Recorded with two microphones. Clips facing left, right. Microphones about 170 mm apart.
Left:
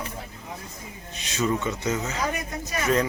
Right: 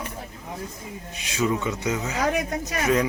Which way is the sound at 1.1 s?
10° right (ahead or behind).